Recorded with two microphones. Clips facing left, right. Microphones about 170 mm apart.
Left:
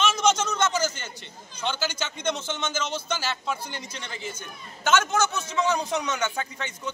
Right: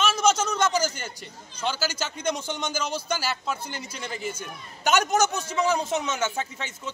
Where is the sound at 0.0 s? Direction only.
10° right (ahead or behind).